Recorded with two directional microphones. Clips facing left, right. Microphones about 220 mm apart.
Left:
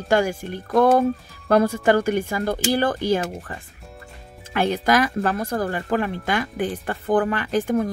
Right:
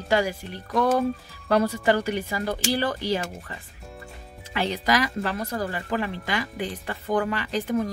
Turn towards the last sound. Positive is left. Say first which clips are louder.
# left 4 dB
turn(degrees=50)  # may be behind; listen again after turning